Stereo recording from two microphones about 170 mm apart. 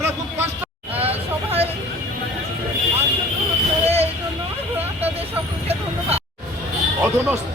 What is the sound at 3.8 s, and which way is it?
Vehicle, 35° right (ahead or behind).